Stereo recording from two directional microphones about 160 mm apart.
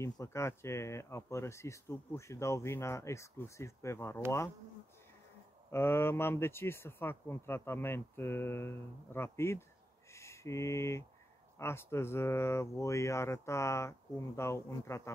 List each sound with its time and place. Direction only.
0.0 s speech: 20° left (ahead or behind)
5.7 s speech: 15° left (ahead or behind)